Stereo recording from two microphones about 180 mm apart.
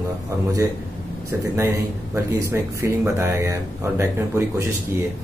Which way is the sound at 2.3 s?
15° right (ahead or behind).